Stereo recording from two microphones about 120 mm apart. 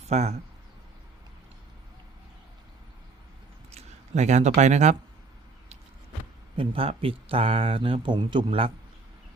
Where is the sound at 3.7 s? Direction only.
70° right (ahead or behind).